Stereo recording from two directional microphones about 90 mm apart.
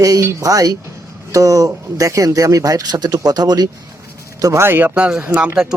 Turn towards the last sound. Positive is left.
turn(degrees=-20)  # may be behind; listen again after turning